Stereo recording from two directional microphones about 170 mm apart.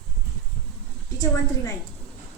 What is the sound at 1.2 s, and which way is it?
Speech, 20° left (ahead or behind).